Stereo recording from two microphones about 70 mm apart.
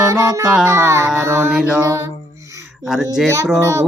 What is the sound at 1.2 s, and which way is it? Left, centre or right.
Mantra, right.